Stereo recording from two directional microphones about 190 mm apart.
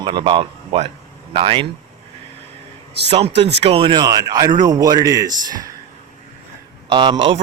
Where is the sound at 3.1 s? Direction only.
30° right (ahead or behind).